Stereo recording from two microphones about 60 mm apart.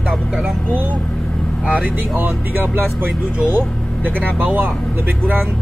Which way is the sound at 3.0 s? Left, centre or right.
Right.